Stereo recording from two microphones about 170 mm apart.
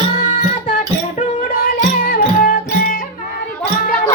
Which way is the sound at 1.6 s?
60° left (ahead or behind).